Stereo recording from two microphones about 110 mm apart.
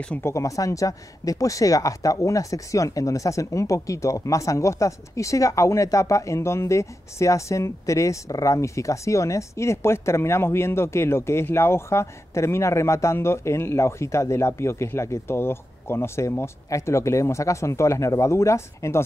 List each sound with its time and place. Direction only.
0.2 s speech: 30° left (ahead or behind)